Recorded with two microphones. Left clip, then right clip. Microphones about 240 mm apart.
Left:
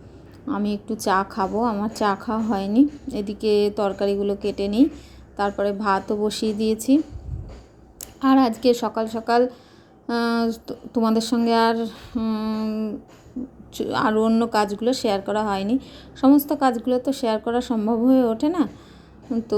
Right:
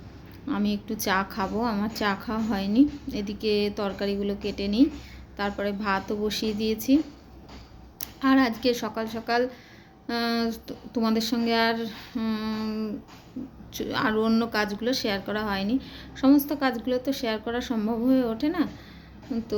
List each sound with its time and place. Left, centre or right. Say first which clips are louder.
0.5 s a woman's voice: left 3 dB; centre
8.2 s speech: left 4 dB; left